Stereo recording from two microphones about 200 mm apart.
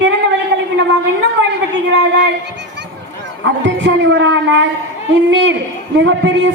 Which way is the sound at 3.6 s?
60° right (ahead or behind).